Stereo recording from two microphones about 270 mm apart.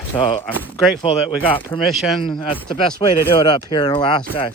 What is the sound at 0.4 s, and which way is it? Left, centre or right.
Speech, centre.